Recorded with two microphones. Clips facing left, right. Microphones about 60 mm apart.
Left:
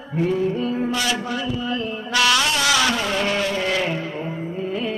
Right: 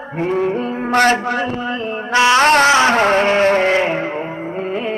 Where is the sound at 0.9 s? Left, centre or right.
Right.